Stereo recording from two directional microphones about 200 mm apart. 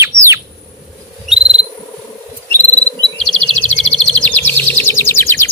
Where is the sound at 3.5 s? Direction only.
30° left (ahead or behind).